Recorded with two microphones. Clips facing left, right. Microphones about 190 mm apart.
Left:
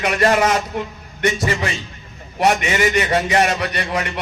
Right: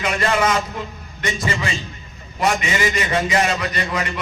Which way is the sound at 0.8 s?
65° left (ahead or behind).